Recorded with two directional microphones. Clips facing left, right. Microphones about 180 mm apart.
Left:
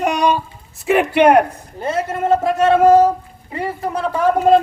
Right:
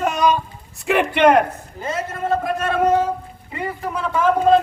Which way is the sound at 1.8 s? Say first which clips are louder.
Left 5 dB; 30° left (ahead or behind).